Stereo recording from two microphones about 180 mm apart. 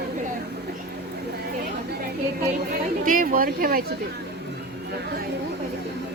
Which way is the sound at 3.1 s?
50° right (ahead or behind).